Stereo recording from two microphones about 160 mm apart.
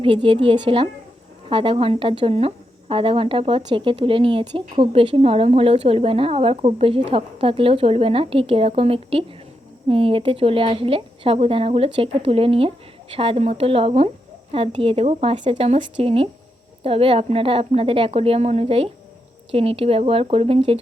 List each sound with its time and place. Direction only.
0.0 s speech: 35° right (ahead or behind)